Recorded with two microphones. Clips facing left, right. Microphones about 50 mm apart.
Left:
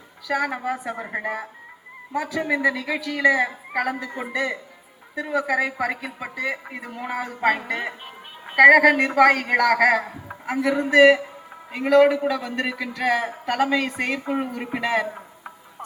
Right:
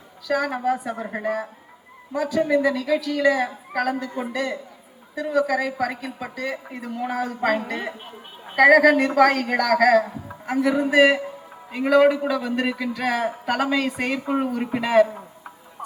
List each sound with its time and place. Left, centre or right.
0.3 s a man's voice: centre